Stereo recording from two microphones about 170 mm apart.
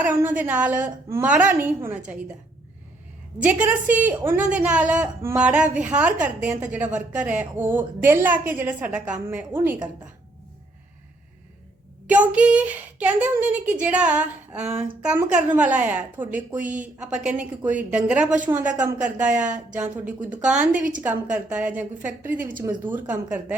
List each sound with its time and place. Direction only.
0.0 s a woman's voice: 10° right (ahead or behind)
3.4 s a woman's voice: 10° right (ahead or behind)
12.0 s a woman's voice: 10° right (ahead or behind)